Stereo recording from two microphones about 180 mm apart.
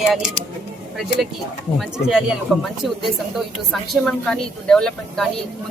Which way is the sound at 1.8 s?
5° right (ahead or behind).